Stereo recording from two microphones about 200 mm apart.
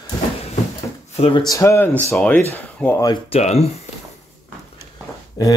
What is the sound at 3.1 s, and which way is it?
Speech, 30° left (ahead or behind).